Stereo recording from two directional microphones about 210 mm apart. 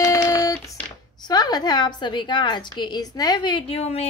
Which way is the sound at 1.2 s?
20° left (ahead or behind).